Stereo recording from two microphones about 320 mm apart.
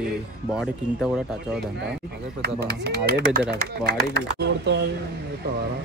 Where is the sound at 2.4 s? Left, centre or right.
Right.